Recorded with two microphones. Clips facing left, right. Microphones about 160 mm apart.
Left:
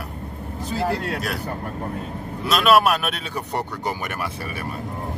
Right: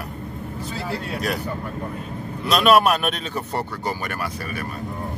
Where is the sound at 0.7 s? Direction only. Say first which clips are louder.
Left 6 dB; 65° left (ahead or behind).